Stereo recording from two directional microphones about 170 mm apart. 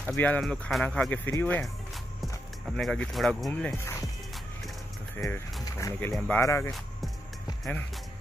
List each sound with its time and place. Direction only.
0.0 s speech: 10° left (ahead or behind)
2.6 s speech: 5° left (ahead or behind)
3.7 s speech: 15° left (ahead or behind)
5.1 s speech: 15° left (ahead or behind)